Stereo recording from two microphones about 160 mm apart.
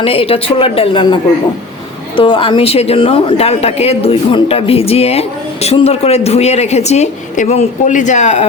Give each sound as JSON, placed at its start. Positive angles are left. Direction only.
{"t": 0.0, "sound": "speech", "side_deg": 35}